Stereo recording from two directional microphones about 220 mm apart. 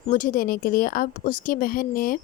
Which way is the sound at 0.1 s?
40° left (ahead or behind).